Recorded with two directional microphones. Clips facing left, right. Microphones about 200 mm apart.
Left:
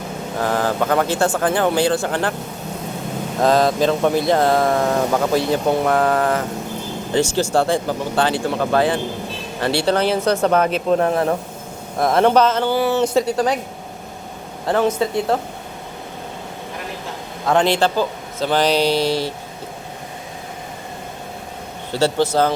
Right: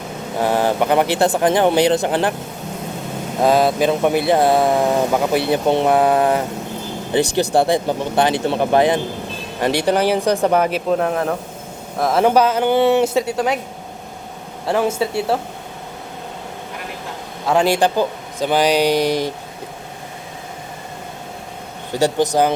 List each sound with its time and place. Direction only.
0.3 s speech: 20° right (ahead or behind)
3.4 s speech: 10° right (ahead or behind)
13.3 s a woman's voice: centre (ahead or behind)
14.7 s speech: 10° right (ahead or behind)
17.4 s speech: 10° right (ahead or behind)
21.9 s speech: 15° right (ahead or behind)